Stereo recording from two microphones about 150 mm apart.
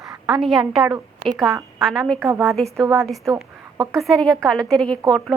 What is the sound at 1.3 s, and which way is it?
Speech, 20° right (ahead or behind).